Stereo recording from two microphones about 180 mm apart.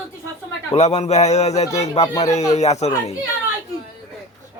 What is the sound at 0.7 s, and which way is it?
A man's voice, 40° left (ahead or behind).